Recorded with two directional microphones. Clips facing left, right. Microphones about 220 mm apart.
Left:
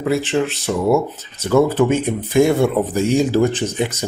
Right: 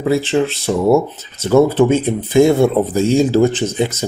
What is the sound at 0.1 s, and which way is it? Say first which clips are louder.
Speech: right 3 dB; 30° right (ahead or behind).